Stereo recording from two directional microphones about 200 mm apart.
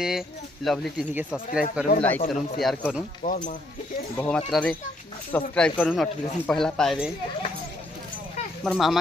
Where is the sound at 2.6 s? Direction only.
Centre (ahead or behind).